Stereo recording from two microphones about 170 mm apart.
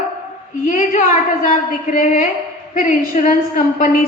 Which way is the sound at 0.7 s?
50° left (ahead or behind).